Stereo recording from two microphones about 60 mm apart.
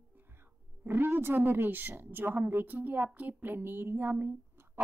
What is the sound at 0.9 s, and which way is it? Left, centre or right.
Speech, right.